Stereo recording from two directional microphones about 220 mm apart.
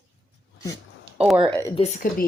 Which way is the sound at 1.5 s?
15° left (ahead or behind).